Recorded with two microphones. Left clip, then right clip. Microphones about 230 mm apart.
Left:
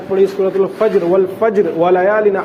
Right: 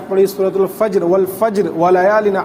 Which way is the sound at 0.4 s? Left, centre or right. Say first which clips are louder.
Left 1 dB; right.